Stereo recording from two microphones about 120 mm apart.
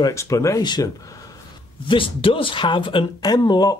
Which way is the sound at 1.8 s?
45° left (ahead or behind).